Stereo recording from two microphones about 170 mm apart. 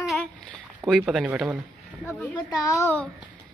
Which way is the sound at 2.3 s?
20° left (ahead or behind).